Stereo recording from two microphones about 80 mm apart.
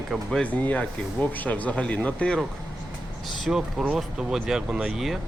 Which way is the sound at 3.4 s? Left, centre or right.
Centre.